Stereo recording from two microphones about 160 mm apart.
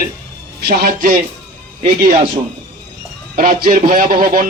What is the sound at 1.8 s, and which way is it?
Speech, 50° right (ahead or behind).